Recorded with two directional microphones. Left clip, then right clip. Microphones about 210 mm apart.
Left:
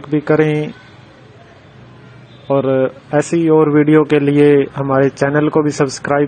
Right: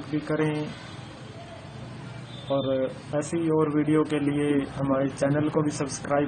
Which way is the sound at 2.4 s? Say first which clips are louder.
Left 12 dB; 40° left (ahead or behind).